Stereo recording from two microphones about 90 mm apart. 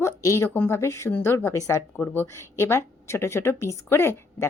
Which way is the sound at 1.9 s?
20° left (ahead or behind).